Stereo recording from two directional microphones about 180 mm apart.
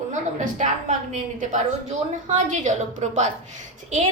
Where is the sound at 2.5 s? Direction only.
40° right (ahead or behind).